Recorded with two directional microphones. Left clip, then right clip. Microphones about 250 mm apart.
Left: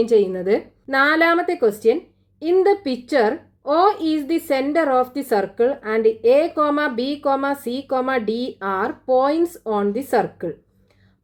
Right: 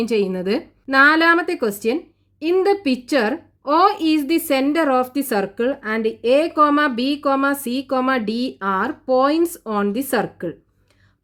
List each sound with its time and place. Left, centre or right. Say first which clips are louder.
0.2 s a woman's voice: left 2 dB; right